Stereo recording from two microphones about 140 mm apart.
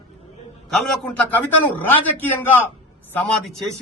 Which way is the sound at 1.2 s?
15° left (ahead or behind).